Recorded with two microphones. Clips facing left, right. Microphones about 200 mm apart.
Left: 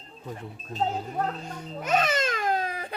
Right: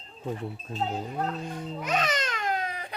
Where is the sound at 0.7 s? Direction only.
40° left (ahead or behind).